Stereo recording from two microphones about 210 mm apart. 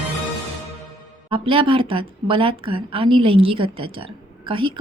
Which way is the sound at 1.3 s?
25° right (ahead or behind).